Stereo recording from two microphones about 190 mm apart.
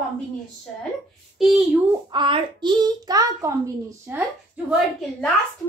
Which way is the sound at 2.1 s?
25° right (ahead or behind).